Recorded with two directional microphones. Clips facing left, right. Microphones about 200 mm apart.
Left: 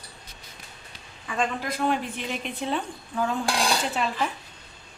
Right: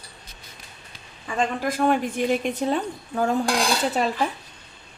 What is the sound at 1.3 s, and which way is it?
A woman's voice, 45° right (ahead or behind).